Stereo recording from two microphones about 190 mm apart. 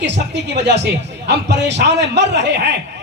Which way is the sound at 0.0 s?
65° right (ahead or behind).